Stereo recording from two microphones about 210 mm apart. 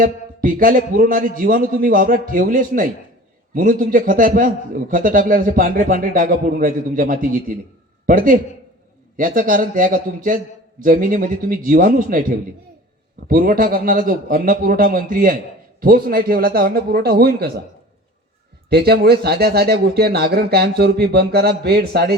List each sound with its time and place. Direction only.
0.0 s a man's voice: 40° right (ahead or behind)
13.2 s a man's voice: 40° right (ahead or behind)
18.7 s speech: 50° right (ahead or behind)